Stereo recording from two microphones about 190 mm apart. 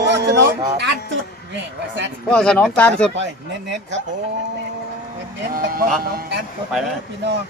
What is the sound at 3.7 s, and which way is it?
Speech, 70° right (ahead or behind).